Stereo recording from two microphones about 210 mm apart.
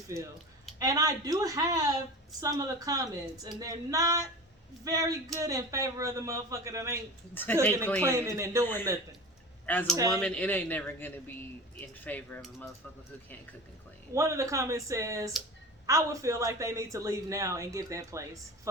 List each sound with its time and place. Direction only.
0.8 s a man's voice: 15° right (ahead or behind)
7.4 s a man's voice: 10° left (ahead or behind)
8.0 s a man's voice: 15° right (ahead or behind)
9.6 s a man's voice: 10° left (ahead or behind)
14.1 s a man's voice: 15° right (ahead or behind)